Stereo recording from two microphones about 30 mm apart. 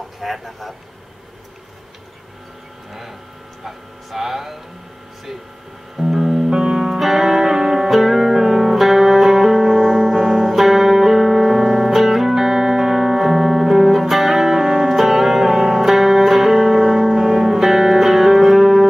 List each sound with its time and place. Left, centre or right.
0.2 s speech: centre
2.9 s speech: centre
5.9 s music: centre
6.5 s music: centre
6.8 s music: centre